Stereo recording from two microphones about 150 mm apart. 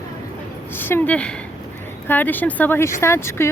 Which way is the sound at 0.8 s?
10° left (ahead or behind).